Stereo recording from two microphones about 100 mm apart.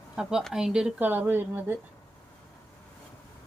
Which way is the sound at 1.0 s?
20° right (ahead or behind).